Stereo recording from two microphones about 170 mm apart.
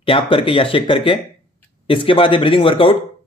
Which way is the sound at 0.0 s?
30° left (ahead or behind).